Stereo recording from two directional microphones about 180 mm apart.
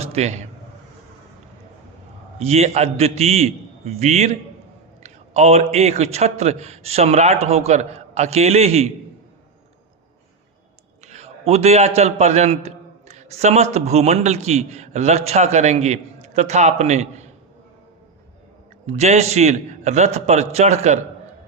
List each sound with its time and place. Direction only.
0.0 s a sound: 35° right (ahead or behind)
2.4 s a man's voice: 35° right (ahead or behind)
11.0 s a man's voice: 40° right (ahead or behind)
18.9 s a man's voice: 40° right (ahead or behind)